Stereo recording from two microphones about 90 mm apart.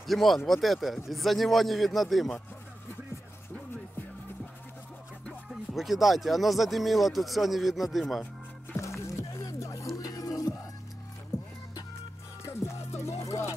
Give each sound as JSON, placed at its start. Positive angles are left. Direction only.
{"t": 0.0, "sound": "speech", "side_deg": 0}
{"t": 5.5, "sound": "speech", "side_deg": 0}
{"t": 8.7, "sound": "music", "side_deg": 35}
{"t": 12.4, "sound": "music", "side_deg": 30}